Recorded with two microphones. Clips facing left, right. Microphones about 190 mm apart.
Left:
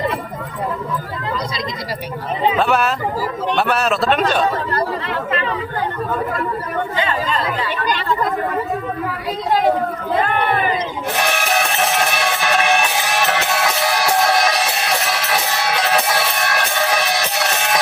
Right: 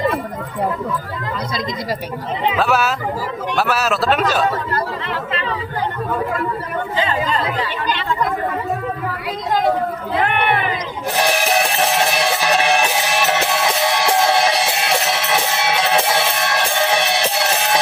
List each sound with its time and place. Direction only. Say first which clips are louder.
2.6 s a man's voice: left 1 dB; 5° right (ahead or behind)
6.9 s speech: right 3 dB; 35° right (ahead or behind)
10.2 s speech: even; 75° right (ahead or behind)
11.2 s music: right 3 dB; 30° right (ahead or behind)
13.9 s music: even; 25° right (ahead or behind)